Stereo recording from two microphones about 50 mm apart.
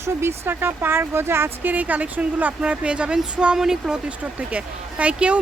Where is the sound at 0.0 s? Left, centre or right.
Right.